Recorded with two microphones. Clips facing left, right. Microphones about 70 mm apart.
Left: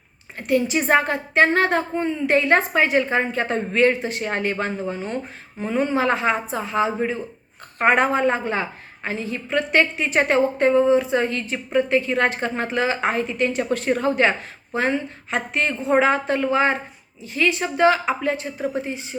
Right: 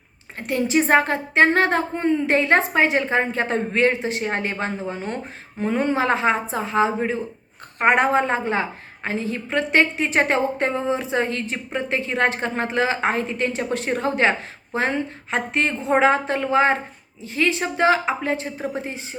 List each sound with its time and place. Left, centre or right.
0.3 s a woman's voice: right